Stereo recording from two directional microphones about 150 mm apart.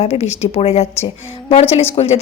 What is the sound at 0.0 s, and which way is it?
A woman's voice, 45° left (ahead or behind).